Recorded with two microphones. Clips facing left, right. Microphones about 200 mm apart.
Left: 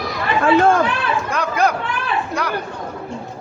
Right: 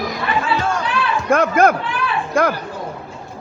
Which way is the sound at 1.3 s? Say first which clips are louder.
Right 7 dB; 50° right (ahead or behind).